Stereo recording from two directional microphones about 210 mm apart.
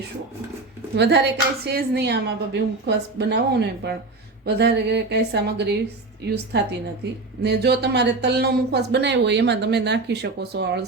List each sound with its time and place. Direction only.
0.9 s a woman's voice: 55° right (ahead or behind)